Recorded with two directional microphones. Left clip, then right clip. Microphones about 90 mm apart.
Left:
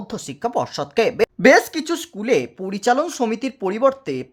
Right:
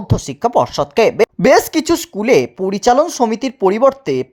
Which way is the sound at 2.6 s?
35° right (ahead or behind).